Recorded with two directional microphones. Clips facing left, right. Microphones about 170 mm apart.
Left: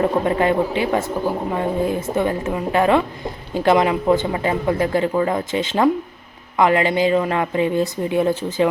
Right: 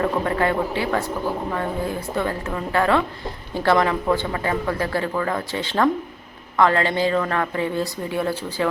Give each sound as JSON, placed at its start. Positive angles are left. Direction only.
{"t": 0.0, "sound": "a woman's voice", "side_deg": 20}